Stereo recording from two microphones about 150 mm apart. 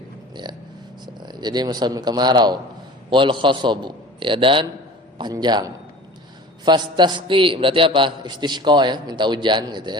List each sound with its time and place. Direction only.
0.4 s a man's voice: 30° right (ahead or behind)